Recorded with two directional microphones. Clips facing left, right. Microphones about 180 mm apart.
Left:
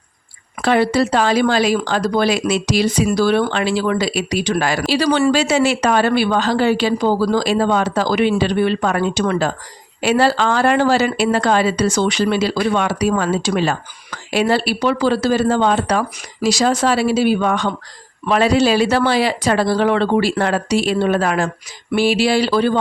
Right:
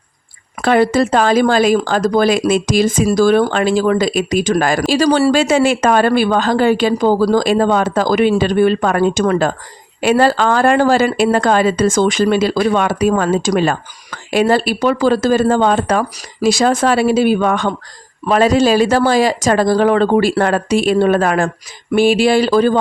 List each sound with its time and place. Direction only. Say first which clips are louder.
0.6 s speech: right 3 dB; 50° right (ahead or behind)
5.3 s speech: right 3 dB; 50° right (ahead or behind)